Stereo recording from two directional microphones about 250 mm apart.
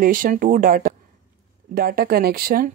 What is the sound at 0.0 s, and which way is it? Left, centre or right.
Speech, right.